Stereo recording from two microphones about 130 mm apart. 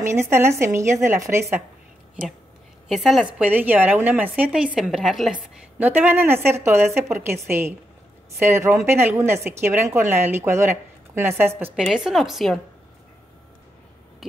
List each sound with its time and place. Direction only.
0.0 s a woman's voice: 20° right (ahead or behind)
2.9 s a woman's voice: centre (ahead or behind)
3.3 s a woman's voice: 10° right (ahead or behind)
5.8 s a woman's voice: 15° right (ahead or behind)
11.7 s a woman's voice: 5° right (ahead or behind)